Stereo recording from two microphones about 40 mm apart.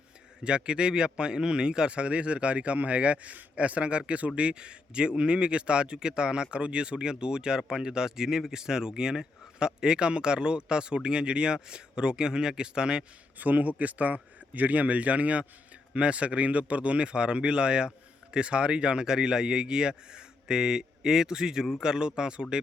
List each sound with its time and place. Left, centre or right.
0.4 s a man's voice: right
13.4 s a man's voice: right